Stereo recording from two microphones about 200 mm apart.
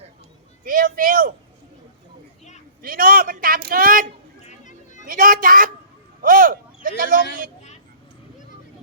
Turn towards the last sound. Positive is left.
turn(degrees=-45)  # may be behind; listen again after turning